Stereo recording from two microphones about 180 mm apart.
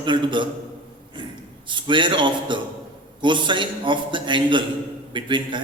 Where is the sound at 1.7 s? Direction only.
25° right (ahead or behind).